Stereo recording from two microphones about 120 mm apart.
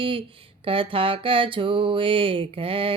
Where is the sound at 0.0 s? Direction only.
45° right (ahead or behind).